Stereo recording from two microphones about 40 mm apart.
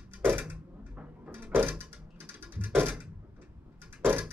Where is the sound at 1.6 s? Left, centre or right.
Right.